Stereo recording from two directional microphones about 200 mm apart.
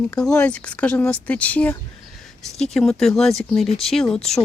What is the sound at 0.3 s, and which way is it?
Speech, 5° left (ahead or behind).